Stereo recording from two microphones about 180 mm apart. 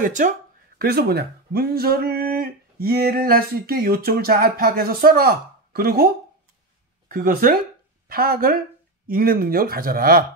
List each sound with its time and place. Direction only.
0.0 s speech: 45° right (ahead or behind)
0.7 s speech: 60° right (ahead or behind)
7.1 s speech: 55° right (ahead or behind)